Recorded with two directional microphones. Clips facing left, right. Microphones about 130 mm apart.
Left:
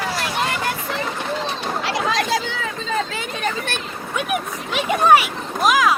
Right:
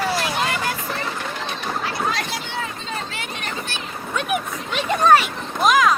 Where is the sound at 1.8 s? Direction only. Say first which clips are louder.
Left 3 dB; 90° left.